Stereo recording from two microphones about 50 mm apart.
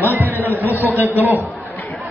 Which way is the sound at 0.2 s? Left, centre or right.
Right.